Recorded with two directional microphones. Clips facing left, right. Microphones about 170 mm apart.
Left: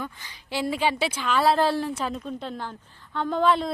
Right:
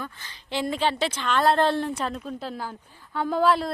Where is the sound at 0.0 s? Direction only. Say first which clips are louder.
Left 2 dB; 15° left (ahead or behind).